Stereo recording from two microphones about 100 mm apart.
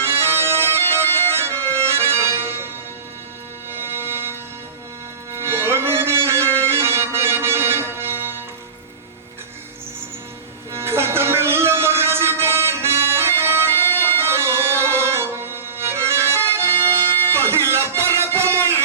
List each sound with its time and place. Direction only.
0.0 s bagpipes: 25° right (ahead or behind)
3.7 s music: 25° right (ahead or behind)
10.7 s music: 25° right (ahead or behind)